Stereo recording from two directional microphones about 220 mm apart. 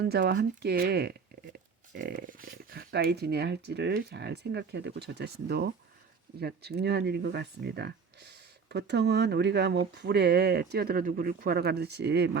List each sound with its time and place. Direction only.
0.0 s speech: 45° right (ahead or behind)